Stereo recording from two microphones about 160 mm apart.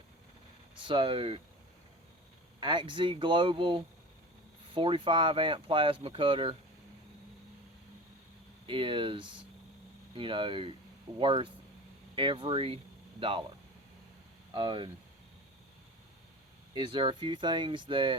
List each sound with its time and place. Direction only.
0.8 s speech: 30° right (ahead or behind)
2.6 s speech: 30° right (ahead or behind)
8.6 s speech: 30° right (ahead or behind)
14.5 s speech: 30° right (ahead or behind)
16.7 s speech: 30° right (ahead or behind)